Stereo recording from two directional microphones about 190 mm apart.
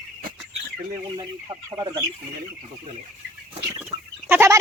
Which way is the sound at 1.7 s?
20° right (ahead or behind).